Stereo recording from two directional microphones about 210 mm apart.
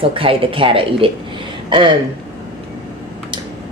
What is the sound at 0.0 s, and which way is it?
Speech, 25° right (ahead or behind).